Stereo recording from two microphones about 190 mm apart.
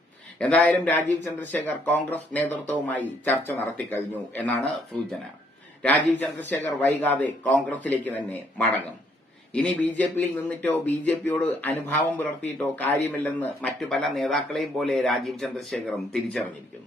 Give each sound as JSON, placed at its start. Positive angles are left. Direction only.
{"t": 0.3, "sound": "speech", "side_deg": 5}